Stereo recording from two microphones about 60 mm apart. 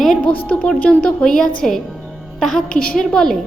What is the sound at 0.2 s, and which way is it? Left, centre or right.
Speech, left.